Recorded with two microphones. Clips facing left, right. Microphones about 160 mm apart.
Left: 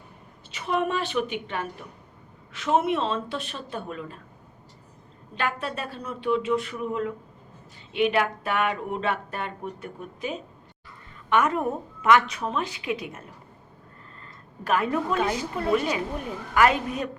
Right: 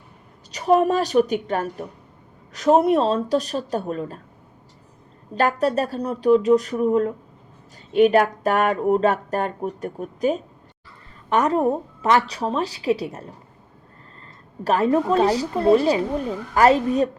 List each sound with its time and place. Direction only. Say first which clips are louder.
0.5 s a woman's voice: right 9 dB; 40° right (ahead or behind)
5.3 s a woman's voice: right 10 dB; 40° right (ahead or behind)
14.6 s a woman's voice: right 6 dB; 35° right (ahead or behind)